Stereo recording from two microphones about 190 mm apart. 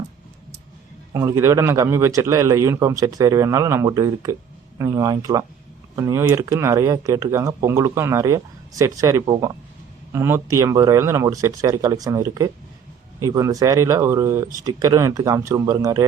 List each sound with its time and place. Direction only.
1.1 s a man's voice: 15° right (ahead or behind)